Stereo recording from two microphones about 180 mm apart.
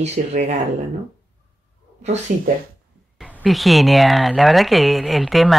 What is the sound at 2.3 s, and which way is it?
Speech, 50° right (ahead or behind).